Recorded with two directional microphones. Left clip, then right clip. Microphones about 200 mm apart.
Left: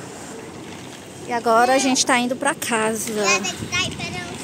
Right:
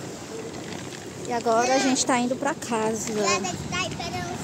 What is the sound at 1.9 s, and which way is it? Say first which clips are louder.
Speech: left 5 dB; 5° left (ahead or behind).